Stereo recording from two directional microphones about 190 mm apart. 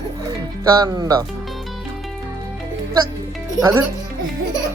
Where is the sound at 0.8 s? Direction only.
20° right (ahead or behind).